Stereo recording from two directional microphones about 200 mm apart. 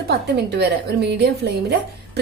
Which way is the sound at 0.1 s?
55° right (ahead or behind).